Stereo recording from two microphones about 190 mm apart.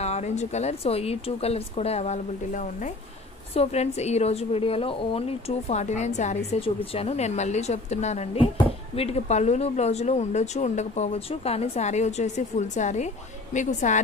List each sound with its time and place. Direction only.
0.0 s speech: 35° left (ahead or behind)